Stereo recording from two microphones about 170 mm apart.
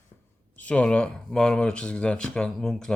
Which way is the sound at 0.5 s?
10° left (ahead or behind).